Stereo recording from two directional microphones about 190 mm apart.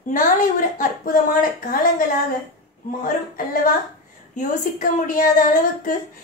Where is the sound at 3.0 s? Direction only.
45° left (ahead or behind).